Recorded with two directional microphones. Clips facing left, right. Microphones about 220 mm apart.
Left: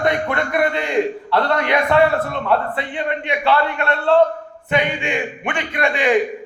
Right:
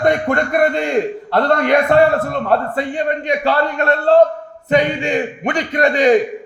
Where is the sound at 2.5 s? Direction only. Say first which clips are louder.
Right 3 dB; 45° right (ahead or behind).